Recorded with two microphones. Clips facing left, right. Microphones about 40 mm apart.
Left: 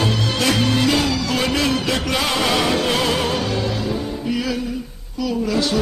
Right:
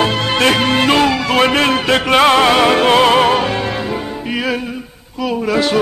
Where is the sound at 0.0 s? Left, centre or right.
Right.